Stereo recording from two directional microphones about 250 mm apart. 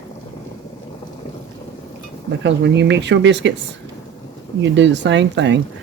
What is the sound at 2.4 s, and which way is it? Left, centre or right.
Speech, right.